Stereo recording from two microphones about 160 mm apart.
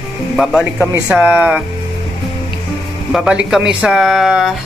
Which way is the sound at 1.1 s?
10° right (ahead or behind).